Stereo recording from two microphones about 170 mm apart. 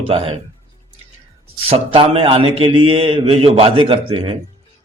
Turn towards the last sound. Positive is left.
turn(degrees=-30)  # may be behind; listen again after turning